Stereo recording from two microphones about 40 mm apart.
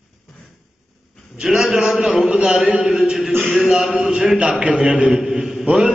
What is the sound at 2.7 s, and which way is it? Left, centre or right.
A man's voice, centre.